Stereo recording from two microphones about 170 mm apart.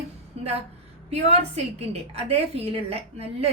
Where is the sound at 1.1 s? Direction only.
40° right (ahead or behind).